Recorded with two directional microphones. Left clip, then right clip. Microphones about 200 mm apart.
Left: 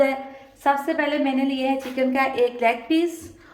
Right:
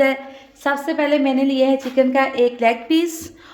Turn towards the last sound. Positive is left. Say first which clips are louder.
# right 3 dB
turn(degrees=-50)  # may be behind; listen again after turning